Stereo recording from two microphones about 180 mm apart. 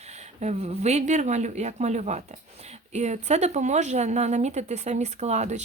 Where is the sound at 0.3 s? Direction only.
35° right (ahead or behind).